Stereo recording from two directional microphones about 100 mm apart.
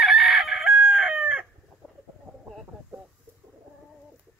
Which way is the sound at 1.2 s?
15° right (ahead or behind).